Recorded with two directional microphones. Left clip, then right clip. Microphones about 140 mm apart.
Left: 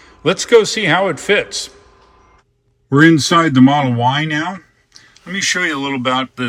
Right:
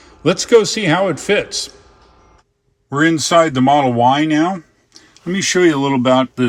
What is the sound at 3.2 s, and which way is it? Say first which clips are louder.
Speech: left 1 dB; 55° right (ahead or behind).